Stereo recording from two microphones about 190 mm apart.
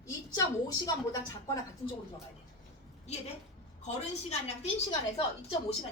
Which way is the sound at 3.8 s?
35° left (ahead or behind).